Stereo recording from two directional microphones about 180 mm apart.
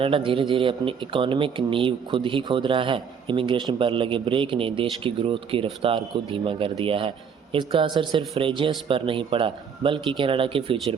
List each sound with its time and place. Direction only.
0.0 s a man's voice: 30° right (ahead or behind)